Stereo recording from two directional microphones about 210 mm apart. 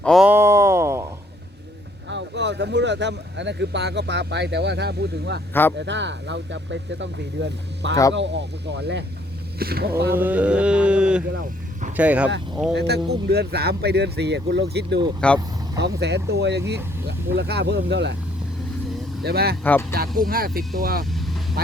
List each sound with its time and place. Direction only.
0.0 s a sound: centre (ahead or behind)
2.0 s speech: 55° right (ahead or behind)
10.2 s mantra: 10° right (ahead or behind)
11.9 s speech: 5° right (ahead or behind)
12.7 s speech: 55° right (ahead or behind)
15.2 s mantra: 5° left (ahead or behind)
15.8 s speech: 55° right (ahead or behind)
19.2 s speech: 50° right (ahead or behind)
21.1 s vehicle: centre (ahead or behind)